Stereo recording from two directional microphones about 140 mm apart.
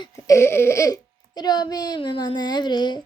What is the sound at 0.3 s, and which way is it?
Speech, 20° left (ahead or behind).